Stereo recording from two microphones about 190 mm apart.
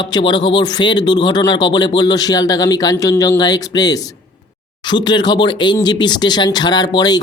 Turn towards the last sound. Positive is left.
turn(degrees=20)  # may be behind; listen again after turning